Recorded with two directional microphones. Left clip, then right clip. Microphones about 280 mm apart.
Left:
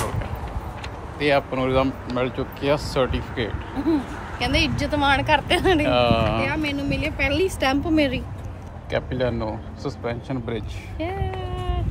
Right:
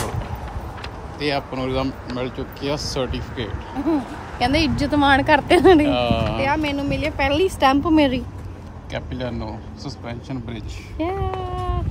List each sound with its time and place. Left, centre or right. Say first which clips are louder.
1.2 s speech: left 3 dB; centre
3.9 s speech: even; right
5.9 s speech: left 1 dB; centre
6.4 s a woman's voice: right 4 dB; right
8.9 s speech: left 5 dB; centre
11.0 s a sound: right 4 dB; right